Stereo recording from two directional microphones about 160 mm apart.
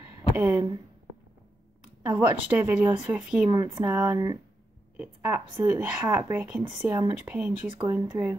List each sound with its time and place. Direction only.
0.4 s speech: 15° right (ahead or behind)
2.0 s speech: 10° right (ahead or behind)
3.4 s speech: 20° right (ahead or behind)
3.8 s speech: 10° right (ahead or behind)